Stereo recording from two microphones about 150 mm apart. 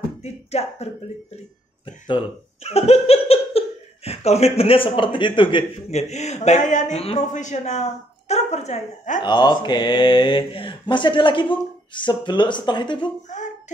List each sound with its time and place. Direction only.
0.2 s speech: 45° left (ahead or behind)
2.0 s speech: 40° left (ahead or behind)
9.2 s speech: 30° left (ahead or behind)